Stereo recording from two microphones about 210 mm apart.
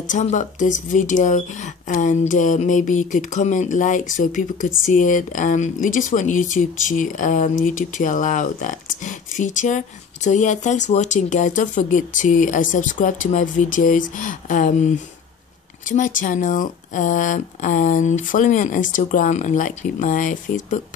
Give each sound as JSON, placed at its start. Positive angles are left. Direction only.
{"t": 0.1, "sound": "a woman's voice", "side_deg": 35}
{"t": 15.9, "sound": "a woman's voice", "side_deg": 40}